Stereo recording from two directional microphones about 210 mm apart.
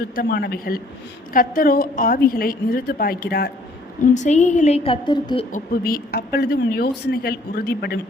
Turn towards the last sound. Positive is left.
turn(degrees=50)  # may be behind; listen again after turning